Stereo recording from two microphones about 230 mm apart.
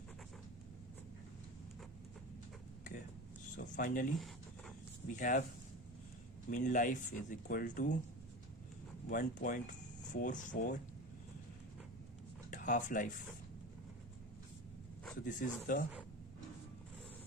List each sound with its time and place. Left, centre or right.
3.6 s speech: left
4.1 s a sound: centre
5.0 s speech: left
6.5 s speech: left
9.0 s speech: left
12.5 s speech: left
15.2 s speech: left